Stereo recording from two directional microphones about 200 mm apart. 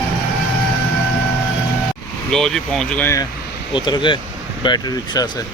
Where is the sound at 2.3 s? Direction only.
Centre (ahead or behind).